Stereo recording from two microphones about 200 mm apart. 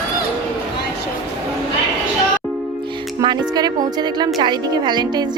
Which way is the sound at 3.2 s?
20° right (ahead or behind).